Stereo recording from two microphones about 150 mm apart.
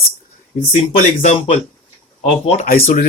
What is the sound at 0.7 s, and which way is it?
Speech, 50° left (ahead or behind).